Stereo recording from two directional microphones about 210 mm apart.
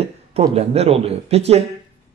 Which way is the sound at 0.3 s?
30° right (ahead or behind).